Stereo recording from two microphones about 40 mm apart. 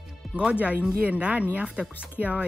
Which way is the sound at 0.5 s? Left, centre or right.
Right.